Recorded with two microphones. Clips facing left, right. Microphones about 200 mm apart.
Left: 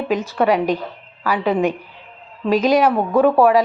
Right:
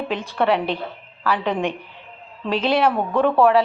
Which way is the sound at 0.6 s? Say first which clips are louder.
Left 5 dB; 40° left (ahead or behind).